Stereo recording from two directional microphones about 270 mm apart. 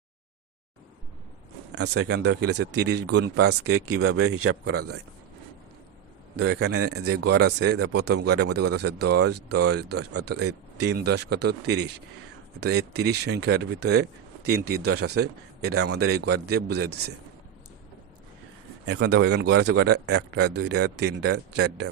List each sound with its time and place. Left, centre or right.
1.8 s speech: right
2.4 s speech: right
3.8 s speech: right
4.3 s speech: right
6.5 s speech: right
18.9 s speech: right